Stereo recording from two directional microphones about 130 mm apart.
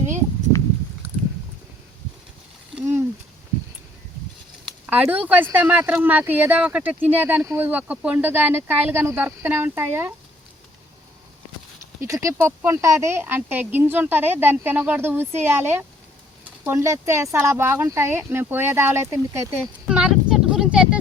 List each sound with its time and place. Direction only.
4.9 s speech: 15° right (ahead or behind)
11.9 s speech: 25° right (ahead or behind)
19.9 s a sound: 5° right (ahead or behind)